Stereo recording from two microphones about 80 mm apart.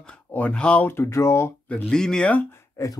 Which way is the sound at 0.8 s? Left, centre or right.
Left.